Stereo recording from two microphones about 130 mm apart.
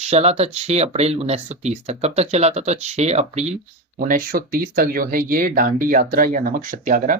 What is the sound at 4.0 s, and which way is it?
Speech, 90° right.